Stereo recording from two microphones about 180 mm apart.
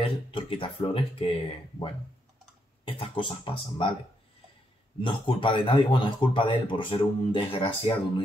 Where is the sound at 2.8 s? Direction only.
30° left (ahead or behind).